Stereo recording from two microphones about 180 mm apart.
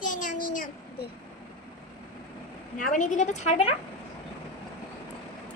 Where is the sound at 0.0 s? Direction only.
45° left (ahead or behind).